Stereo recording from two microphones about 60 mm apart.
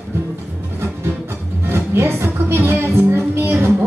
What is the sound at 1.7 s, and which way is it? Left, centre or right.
Music, right.